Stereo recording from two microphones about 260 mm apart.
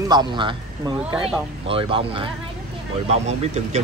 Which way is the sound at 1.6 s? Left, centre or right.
Right.